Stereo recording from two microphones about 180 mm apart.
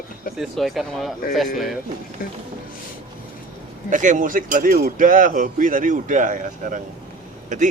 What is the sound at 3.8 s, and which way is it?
Speech, 45° right (ahead or behind).